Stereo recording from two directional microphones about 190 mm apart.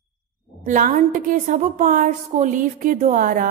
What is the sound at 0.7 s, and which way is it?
Speech, 45° right (ahead or behind).